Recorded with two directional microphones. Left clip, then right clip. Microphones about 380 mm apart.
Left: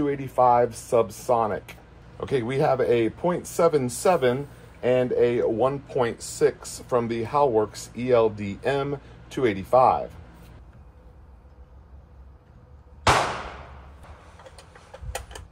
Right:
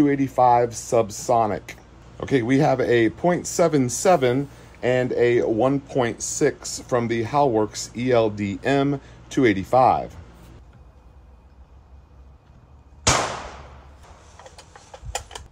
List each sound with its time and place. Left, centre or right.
0.0 s speech: right